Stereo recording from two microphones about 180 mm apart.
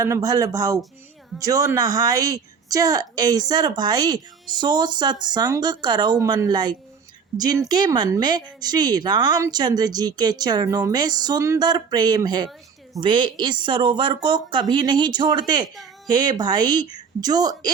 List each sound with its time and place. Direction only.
0.0 s a woman's voice: 20° right (ahead or behind)